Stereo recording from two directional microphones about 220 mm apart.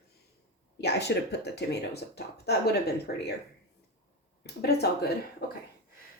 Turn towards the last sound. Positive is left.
turn(degrees=45)  # may be behind; listen again after turning